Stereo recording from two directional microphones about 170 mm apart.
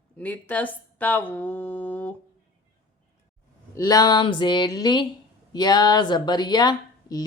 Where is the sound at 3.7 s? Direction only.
20° left (ahead or behind).